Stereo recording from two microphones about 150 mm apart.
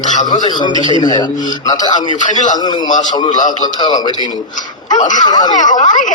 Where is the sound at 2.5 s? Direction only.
30° left (ahead or behind).